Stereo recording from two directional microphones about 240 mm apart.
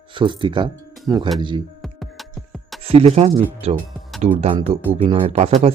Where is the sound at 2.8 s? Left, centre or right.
Right.